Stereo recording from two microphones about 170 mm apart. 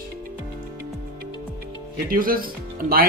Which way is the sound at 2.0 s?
55° right (ahead or behind).